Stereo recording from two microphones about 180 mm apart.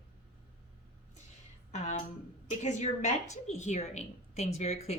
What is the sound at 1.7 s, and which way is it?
A woman's voice, 40° left (ahead or behind).